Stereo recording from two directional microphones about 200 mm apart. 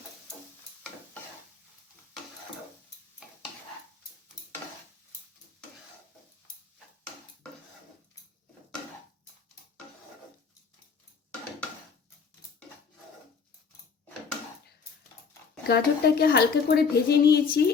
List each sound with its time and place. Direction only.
15.6 s a woman's voice: 50° left (ahead or behind)